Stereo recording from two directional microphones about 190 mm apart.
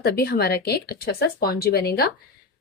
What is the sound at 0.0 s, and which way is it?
Speech, 55° left (ahead or behind).